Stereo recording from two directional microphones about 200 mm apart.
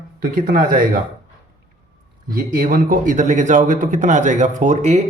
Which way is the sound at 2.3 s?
45° right (ahead or behind).